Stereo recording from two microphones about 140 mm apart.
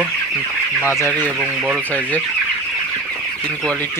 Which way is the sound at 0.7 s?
15° left (ahead or behind).